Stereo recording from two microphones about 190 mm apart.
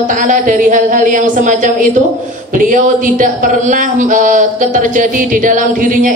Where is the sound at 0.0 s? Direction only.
45° right (ahead or behind).